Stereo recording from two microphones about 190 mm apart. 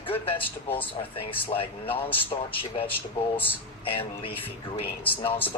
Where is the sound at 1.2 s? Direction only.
30° left (ahead or behind).